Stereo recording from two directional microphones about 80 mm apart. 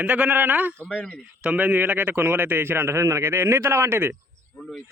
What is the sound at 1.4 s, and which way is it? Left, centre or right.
A man's voice, centre.